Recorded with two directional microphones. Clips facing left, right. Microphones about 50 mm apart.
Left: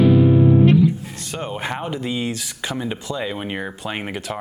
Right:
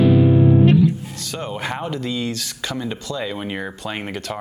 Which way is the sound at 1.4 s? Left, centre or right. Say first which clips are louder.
Even; centre.